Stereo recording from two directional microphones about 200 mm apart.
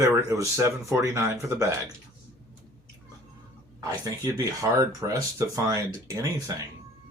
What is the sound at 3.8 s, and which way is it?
Speech, 15° right (ahead or behind).